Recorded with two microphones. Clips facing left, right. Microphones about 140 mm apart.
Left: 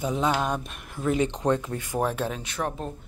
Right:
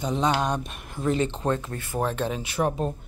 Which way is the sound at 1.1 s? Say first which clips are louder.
Left 4 dB; 15° left (ahead or behind).